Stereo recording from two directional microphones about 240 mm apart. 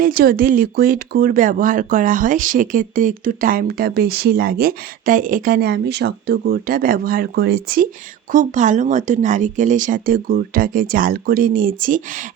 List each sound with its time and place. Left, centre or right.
0.0 s speech: right